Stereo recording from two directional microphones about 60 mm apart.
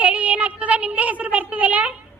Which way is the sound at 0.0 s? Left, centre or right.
Right.